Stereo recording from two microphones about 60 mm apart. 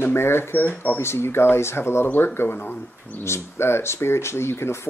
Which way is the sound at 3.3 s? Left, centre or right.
Left.